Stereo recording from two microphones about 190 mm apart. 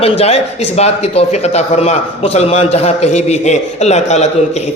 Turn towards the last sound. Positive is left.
turn(degrees=35)  # may be behind; listen again after turning